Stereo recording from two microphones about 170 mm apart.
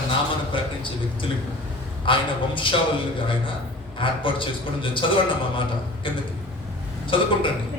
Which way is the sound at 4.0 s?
30° left (ahead or behind).